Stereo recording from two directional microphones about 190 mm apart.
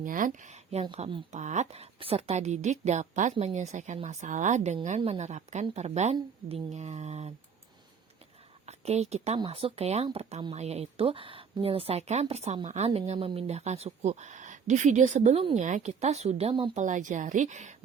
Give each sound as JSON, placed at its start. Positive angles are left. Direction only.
{"t": 0.0, "sound": "speech", "side_deg": -45}
{"t": 8.6, "sound": "speech", "side_deg": -35}
{"t": 16.8, "sound": "speech", "side_deg": -40}